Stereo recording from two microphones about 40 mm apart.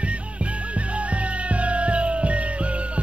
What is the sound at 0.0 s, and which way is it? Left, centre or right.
Music, right.